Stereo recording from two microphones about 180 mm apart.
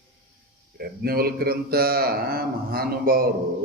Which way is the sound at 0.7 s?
55° right (ahead or behind).